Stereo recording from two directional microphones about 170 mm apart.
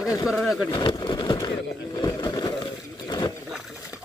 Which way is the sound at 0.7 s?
25° left (ahead or behind).